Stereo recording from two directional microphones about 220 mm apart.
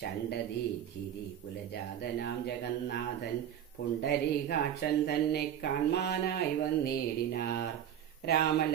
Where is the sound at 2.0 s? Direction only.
45° left (ahead or behind).